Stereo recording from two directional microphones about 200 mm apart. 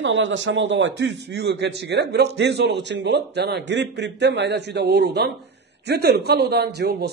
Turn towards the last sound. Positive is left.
turn(degrees=-55)  # may be behind; listen again after turning